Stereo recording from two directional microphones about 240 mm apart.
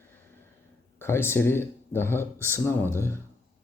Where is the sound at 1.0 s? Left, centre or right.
Centre.